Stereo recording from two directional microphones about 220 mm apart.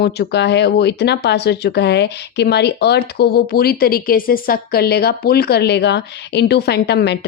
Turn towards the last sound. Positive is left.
turn(degrees=50)  # may be behind; listen again after turning